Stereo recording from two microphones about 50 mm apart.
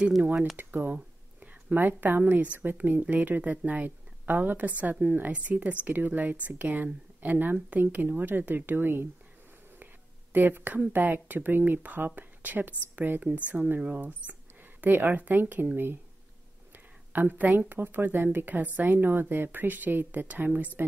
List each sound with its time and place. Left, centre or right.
0.6 s speech: right
10.3 s speech: right
13.3 s speech: right
16.7 s a sound: right
17.5 s speech: right
18.9 s speech: right